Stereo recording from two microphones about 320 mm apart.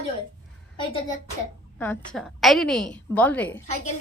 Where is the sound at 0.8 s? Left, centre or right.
Centre.